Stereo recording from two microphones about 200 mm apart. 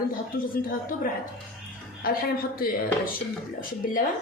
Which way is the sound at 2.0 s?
45° left (ahead or behind).